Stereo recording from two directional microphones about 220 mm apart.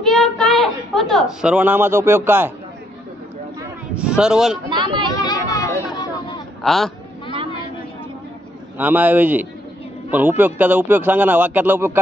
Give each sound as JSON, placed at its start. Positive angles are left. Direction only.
{"t": 0.1, "sound": "a woman's voice", "side_deg": 0}
{"t": 4.0, "sound": "speech", "side_deg": -5}
{"t": 4.6, "sound": "speech", "side_deg": -20}
{"t": 5.1, "sound": "a sound", "side_deg": 20}
{"t": 6.6, "sound": "speech", "side_deg": 0}
{"t": 8.7, "sound": "speech", "side_deg": -5}